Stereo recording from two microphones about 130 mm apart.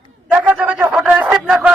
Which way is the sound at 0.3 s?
10° right (ahead or behind).